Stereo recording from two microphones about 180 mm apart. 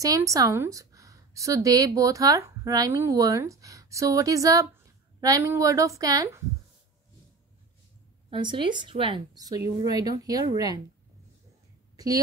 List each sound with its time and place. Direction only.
0.0 s a woman's voice: 20° right (ahead or behind)
8.3 s a woman's voice: 25° right (ahead or behind)